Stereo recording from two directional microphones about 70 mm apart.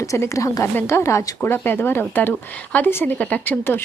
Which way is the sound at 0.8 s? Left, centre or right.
Left.